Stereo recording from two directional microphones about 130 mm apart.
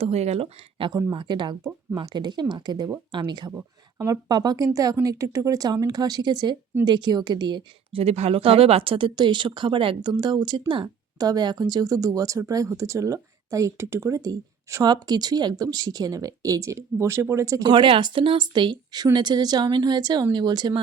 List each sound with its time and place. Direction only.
0.0 s speech: 55° right (ahead or behind); by 8.0 s 35° right (ahead or behind)
8.0 s speech: 50° right (ahead or behind); by 17.7 s 20° right (ahead or behind)
17.7 s speech: 40° right (ahead or behind)